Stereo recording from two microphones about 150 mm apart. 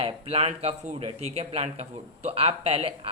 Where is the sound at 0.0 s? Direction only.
40° right (ahead or behind).